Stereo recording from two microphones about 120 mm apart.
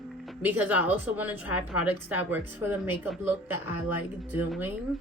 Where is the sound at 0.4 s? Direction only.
15° right (ahead or behind).